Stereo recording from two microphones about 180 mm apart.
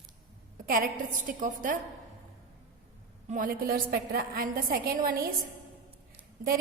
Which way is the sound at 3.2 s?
45° right (ahead or behind).